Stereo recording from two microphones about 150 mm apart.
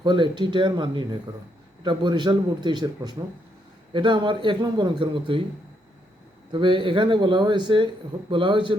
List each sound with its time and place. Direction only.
0.0 s a man's voice: 30° right (ahead or behind)
6.5 s a man's voice: 35° right (ahead or behind)